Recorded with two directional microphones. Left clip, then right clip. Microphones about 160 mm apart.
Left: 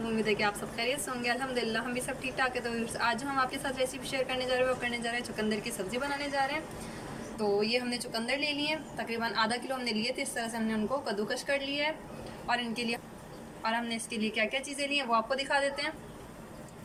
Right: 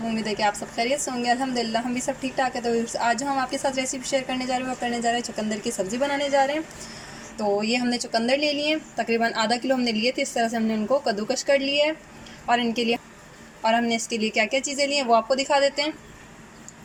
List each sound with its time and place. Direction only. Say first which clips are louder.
0.3 s a woman's voice: right 8 dB; 40° right (ahead or behind)